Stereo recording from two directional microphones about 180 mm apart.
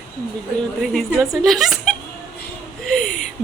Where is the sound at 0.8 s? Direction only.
Centre (ahead or behind).